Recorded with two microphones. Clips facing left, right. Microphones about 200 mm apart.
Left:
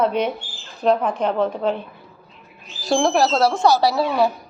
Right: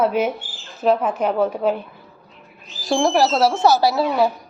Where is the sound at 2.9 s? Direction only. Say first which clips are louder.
Even; centre (ahead or behind).